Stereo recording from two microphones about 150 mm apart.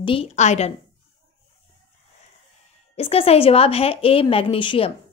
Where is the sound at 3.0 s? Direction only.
40° left (ahead or behind).